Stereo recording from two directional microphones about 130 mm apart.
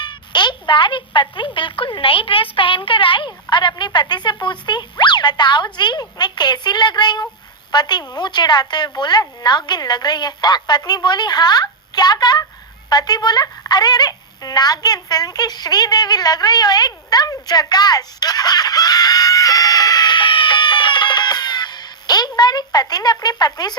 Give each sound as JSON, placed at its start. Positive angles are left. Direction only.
{"t": 0.0, "sound": "speech", "side_deg": 35}